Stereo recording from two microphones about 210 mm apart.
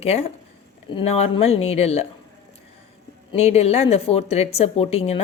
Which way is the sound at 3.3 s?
30° left (ahead or behind).